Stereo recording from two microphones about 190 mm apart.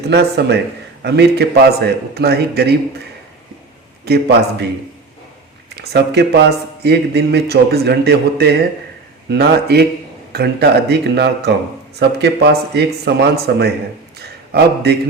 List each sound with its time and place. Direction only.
0.1 s speech: 60° right (ahead or behind)
4.0 s speech: 60° right (ahead or behind)
5.6 s speech: 60° right (ahead or behind)
14.2 s a sound: 60° right (ahead or behind)